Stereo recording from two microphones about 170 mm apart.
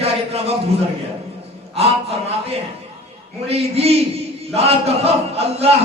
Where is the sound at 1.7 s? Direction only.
35° right (ahead or behind).